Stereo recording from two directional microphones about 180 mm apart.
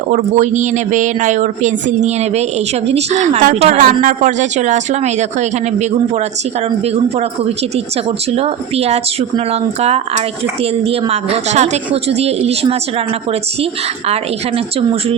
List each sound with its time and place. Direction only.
0.1 s a woman's voice: 40° right (ahead or behind)
8.3 s a woman's voice: 35° right (ahead or behind)